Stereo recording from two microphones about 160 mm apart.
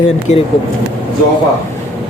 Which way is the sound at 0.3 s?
45° left (ahead or behind).